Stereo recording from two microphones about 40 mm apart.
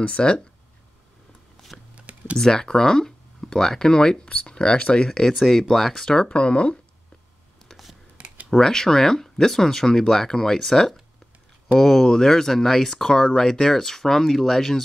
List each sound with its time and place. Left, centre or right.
0.0 s speech: left
1.7 s a sound: centre
2.3 s speech: centre
5.4 s speech: centre
6.2 s speech: left
8.5 s speech: centre